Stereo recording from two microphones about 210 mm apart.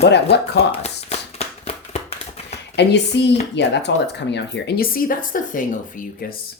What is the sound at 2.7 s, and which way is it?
Speech, 55° left (ahead or behind).